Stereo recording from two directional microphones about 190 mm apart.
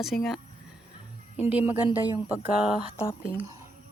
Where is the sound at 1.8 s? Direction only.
20° left (ahead or behind).